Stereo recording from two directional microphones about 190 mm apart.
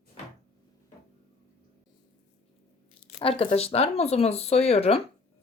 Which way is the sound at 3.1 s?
30° left (ahead or behind).